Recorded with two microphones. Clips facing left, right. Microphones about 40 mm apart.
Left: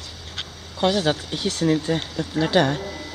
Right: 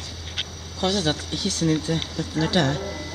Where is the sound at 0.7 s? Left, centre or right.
Centre.